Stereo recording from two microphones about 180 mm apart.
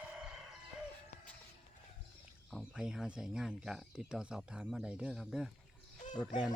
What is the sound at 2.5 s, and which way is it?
Speech, centre (ahead or behind).